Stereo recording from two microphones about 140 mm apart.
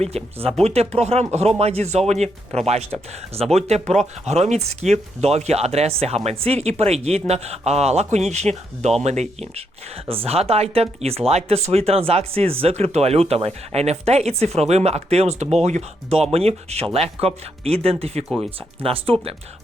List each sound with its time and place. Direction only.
0.0 s speech: 45° right (ahead or behind)